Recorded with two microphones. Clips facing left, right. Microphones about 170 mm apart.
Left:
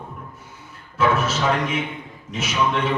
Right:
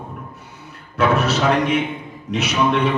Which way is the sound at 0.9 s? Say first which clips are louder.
Right 3 dB; 65° right (ahead or behind).